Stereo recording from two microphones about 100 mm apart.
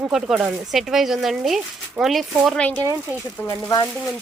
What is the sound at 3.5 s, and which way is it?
Speech, 45° left (ahead or behind).